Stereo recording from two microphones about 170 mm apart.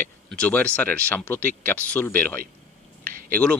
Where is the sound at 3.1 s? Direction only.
55° right (ahead or behind).